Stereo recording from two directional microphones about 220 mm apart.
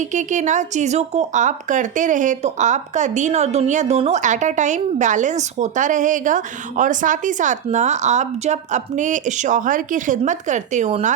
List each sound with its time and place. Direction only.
0.0 s speech: 35° right (ahead or behind)